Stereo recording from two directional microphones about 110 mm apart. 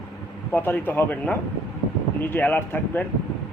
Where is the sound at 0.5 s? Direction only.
15° left (ahead or behind).